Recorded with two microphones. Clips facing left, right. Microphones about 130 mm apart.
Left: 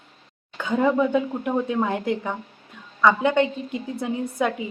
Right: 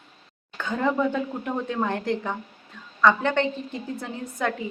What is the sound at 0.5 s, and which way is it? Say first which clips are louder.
Speech: left 4 dB; 10° left (ahead or behind).